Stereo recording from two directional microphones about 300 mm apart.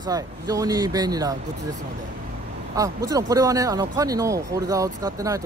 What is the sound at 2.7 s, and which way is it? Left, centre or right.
Speech, centre.